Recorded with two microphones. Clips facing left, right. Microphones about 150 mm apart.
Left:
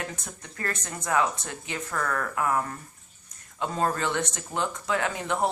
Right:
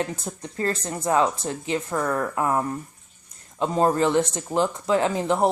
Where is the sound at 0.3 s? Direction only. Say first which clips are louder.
Right 8 dB; 25° right (ahead or behind).